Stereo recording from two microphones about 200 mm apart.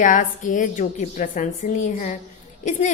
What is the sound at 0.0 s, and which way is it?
A woman's voice, 40° left (ahead or behind).